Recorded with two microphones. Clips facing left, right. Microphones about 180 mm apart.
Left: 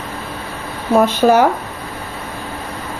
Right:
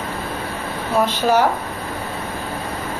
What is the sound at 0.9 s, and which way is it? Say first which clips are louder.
Speech: left 5 dB; 50° left (ahead or behind).